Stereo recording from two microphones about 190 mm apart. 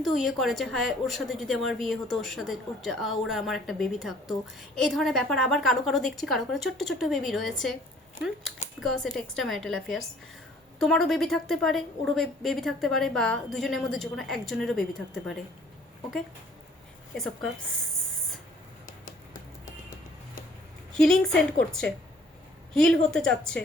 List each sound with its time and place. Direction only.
0.0 s a woman's voice: centre (ahead or behind)
8.6 s a sound: 35° left (ahead or behind)
9.1 s a woman's voice: centre (ahead or behind)
19.0 s music: 45° left (ahead or behind)
20.9 s a woman's voice: centre (ahead or behind)